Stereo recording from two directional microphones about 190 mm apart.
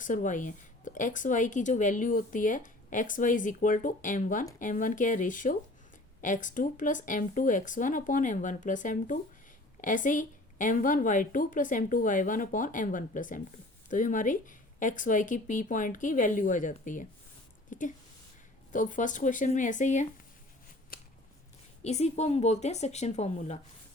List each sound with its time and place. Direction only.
0.0 s a woman's voice: 40° left (ahead or behind)
20.9 s scissors: 50° left (ahead or behind)
21.8 s a woman's voice: 35° left (ahead or behind)